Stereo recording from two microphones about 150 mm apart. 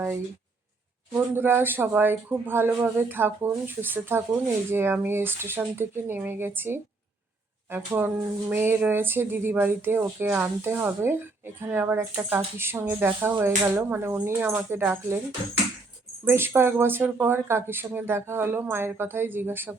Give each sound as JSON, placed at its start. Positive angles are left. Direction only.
{"t": 1.1, "sound": "speech", "side_deg": -15}
{"t": 16.2, "sound": "speech", "side_deg": -15}